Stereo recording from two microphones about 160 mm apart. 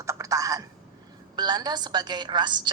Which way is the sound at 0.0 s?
20° right (ahead or behind).